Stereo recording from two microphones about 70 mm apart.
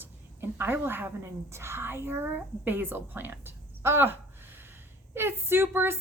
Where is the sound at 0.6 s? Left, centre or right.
Right.